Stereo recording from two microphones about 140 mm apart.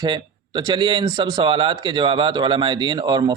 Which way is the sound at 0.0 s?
30° right (ahead or behind).